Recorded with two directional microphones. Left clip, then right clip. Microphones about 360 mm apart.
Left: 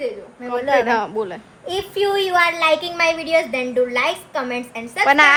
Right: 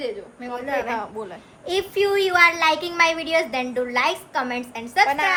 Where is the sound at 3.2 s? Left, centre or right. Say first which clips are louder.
Left 3 dB; right.